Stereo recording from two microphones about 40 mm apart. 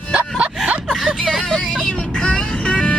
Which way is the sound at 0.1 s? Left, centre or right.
Right.